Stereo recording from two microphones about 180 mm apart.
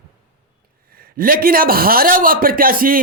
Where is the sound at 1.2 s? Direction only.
55° right (ahead or behind).